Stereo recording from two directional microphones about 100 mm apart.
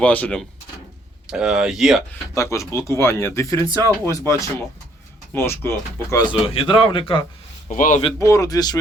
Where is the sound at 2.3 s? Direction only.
30° left (ahead or behind).